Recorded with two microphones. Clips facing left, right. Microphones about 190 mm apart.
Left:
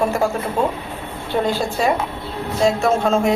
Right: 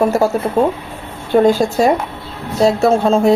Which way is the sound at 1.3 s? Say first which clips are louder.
Right 8 dB; 50° right (ahead or behind).